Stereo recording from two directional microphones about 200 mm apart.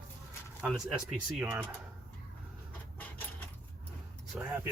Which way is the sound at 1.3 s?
5° right (ahead or behind).